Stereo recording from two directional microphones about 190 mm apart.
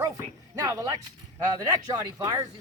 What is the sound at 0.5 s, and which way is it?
Speech, 15° right (ahead or behind).